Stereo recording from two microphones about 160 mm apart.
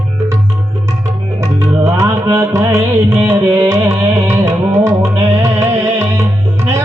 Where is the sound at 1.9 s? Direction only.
15° right (ahead or behind).